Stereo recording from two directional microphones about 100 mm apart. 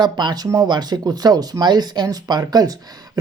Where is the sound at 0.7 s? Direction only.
45° right (ahead or behind).